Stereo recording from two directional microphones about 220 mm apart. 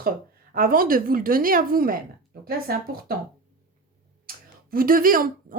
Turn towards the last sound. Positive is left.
turn(degrees=-40)  # may be behind; listen again after turning